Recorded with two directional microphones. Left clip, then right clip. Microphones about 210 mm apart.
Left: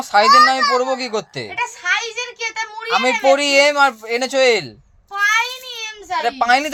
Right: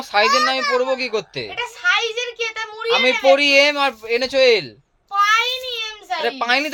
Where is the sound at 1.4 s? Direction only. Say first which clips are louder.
Right 1 dB; 15° right (ahead or behind).